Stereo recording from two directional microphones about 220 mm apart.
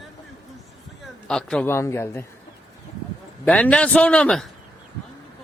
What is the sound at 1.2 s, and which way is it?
A man's voice, 5° left (ahead or behind).